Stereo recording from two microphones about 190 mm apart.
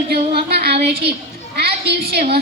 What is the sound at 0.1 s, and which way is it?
A woman's voice, 55° right (ahead or behind).